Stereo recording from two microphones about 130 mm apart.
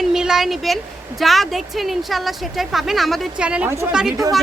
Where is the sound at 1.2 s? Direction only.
Centre (ahead or behind).